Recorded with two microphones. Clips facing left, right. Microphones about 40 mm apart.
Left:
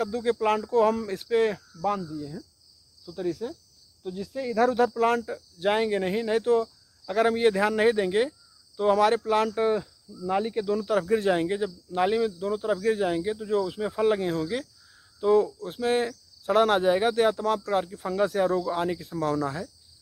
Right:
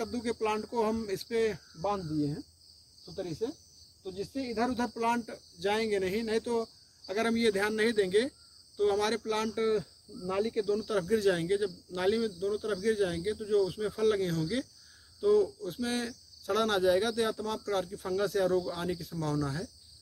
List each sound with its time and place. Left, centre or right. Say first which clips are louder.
0.0 s speech: left 7 dB; left
17.6 s speech: left 5 dB; left